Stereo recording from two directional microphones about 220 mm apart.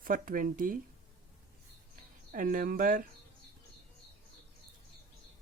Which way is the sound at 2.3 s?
35° right (ahead or behind).